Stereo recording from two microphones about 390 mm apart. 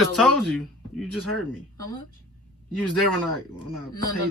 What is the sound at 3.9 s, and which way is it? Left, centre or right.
Speech, left.